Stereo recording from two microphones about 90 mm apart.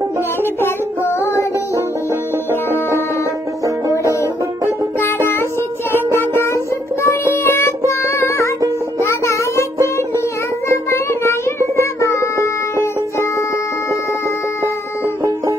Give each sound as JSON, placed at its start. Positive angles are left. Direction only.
{"t": 0.4, "sound": "music", "side_deg": 25}
{"t": 5.0, "sound": "music", "side_deg": 25}
{"t": 10.9, "sound": "music", "side_deg": 30}